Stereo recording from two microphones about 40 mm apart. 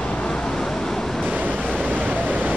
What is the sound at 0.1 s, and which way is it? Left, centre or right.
Vehicle, left.